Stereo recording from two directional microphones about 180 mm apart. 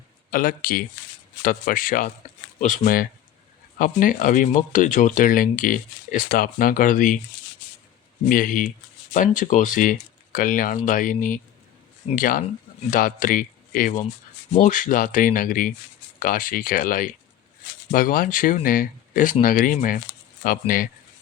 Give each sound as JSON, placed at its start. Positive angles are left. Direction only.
{"t": 0.3, "sound": "speech", "side_deg": 50}
{"t": 8.3, "sound": "speech", "side_deg": 50}